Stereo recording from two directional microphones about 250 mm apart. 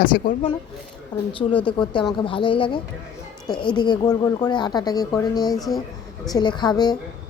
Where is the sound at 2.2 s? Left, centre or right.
Centre.